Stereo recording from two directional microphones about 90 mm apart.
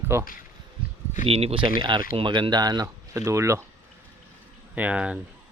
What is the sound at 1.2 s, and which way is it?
Speech, 90° right.